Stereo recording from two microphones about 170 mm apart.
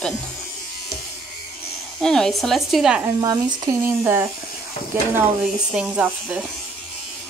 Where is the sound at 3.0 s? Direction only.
20° right (ahead or behind).